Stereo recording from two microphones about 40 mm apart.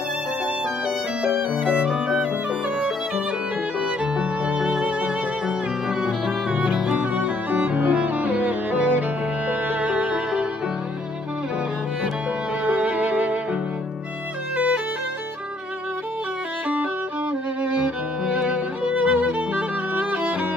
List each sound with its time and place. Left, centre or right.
1.2 s violin: right
4.6 s music: centre
7.2 s music: right
12.6 s music: right
18.3 s music: right